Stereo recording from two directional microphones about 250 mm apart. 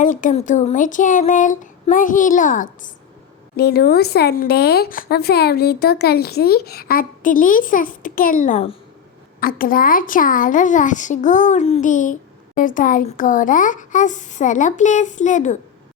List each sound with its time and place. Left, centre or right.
0.0 s speech: left